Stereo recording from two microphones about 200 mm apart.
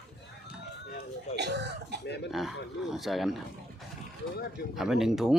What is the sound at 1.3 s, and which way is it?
Cough, 60° right (ahead or behind).